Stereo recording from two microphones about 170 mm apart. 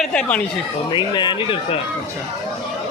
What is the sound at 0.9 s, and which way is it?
Speech, 25° left (ahead or behind).